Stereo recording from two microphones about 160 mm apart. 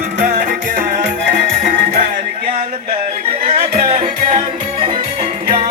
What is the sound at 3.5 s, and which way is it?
Music, 40° right (ahead or behind).